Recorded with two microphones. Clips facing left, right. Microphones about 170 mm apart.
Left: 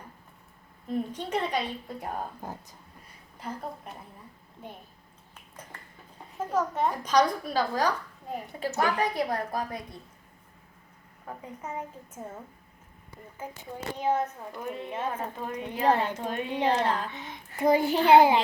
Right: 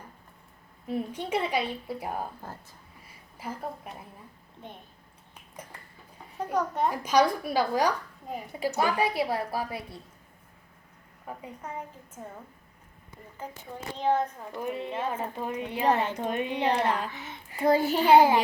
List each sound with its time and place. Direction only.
0.9 s a woman's voice: 10° right (ahead or behind)
2.4 s a woman's voice: 15° left (ahead or behind)
3.3 s a woman's voice: 5° right (ahead or behind)
6.4 s a woman's voice: centre (ahead or behind)
11.6 s a woman's voice: 5° left (ahead or behind)
13.9 s a child's voice: 5° left (ahead or behind)
14.6 s a woman's voice: 10° right (ahead or behind)
15.9 s a woman's voice: 10° left (ahead or behind)
16.6 s a woman's voice: 10° right (ahead or behind)
17.1 s a woman's voice: 15° left (ahead or behind)